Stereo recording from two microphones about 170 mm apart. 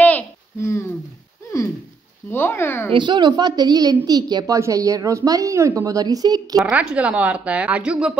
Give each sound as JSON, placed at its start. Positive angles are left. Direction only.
{"t": 0.0, "sound": "a sound", "side_deg": 15}
{"t": 2.3, "sound": "speech", "side_deg": 15}
{"t": 2.9, "sound": "a woman's voice", "side_deg": -25}
{"t": 6.6, "sound": "speech", "side_deg": -5}